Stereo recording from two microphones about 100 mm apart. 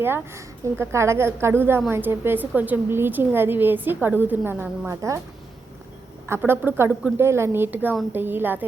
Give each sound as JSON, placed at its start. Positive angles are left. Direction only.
{"t": 0.0, "sound": "a woman's voice", "side_deg": -25}
{"t": 4.9, "sound": "speech", "side_deg": -30}
{"t": 6.2, "sound": "a woman's voice", "side_deg": -25}